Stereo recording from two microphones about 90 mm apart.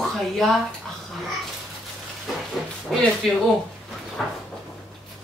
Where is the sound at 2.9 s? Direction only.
Centre (ahead or behind).